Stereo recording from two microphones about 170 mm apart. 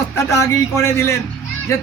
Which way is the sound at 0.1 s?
15° left (ahead or behind).